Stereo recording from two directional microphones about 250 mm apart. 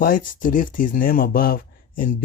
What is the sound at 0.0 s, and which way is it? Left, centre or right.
Speech, left.